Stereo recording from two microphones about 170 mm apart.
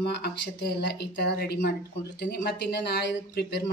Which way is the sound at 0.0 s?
70° left (ahead or behind).